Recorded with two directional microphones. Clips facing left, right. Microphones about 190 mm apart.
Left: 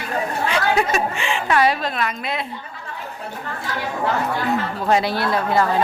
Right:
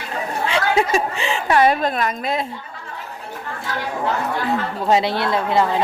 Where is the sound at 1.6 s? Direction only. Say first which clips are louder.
Right 3 dB; 50° right (ahead or behind).